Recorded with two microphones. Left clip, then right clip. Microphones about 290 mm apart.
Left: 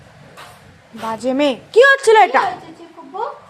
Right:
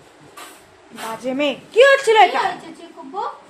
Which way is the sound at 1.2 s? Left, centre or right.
Left.